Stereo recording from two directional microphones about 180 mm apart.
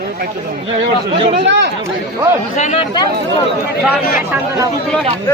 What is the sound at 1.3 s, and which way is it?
Speech, 75° right (ahead or behind).